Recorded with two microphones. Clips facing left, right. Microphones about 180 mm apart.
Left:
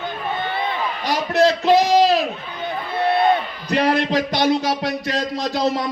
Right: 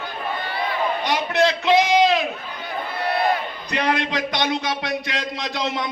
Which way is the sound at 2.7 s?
25° left (ahead or behind).